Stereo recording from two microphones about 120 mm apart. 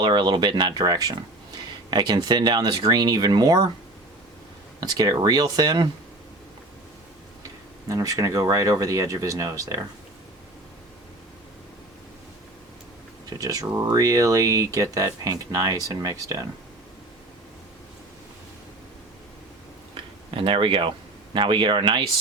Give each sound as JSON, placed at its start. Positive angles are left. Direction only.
{"t": 0.0, "sound": "speech", "side_deg": -40}
{"t": 4.8, "sound": "speech", "side_deg": -35}
{"t": 7.9, "sound": "speech", "side_deg": -30}
{"t": 13.4, "sound": "speech", "side_deg": -30}
{"t": 20.3, "sound": "speech", "side_deg": -45}